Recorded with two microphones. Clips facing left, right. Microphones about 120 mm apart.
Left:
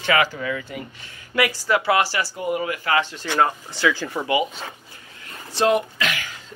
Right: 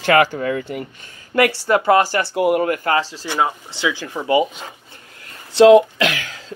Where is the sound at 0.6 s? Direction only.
65° right (ahead or behind).